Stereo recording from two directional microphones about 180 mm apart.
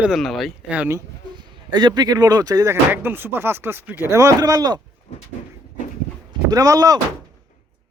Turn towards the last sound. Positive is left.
turn(degrees=-20)  # may be behind; listen again after turning